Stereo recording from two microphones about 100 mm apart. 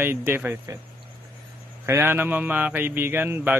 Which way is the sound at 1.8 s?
25° right (ahead or behind).